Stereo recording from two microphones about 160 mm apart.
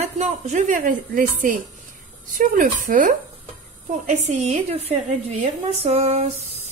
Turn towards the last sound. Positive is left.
turn(degrees=-40)  # may be behind; listen again after turning